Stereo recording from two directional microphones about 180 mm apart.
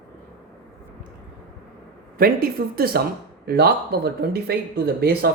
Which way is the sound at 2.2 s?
55° right (ahead or behind).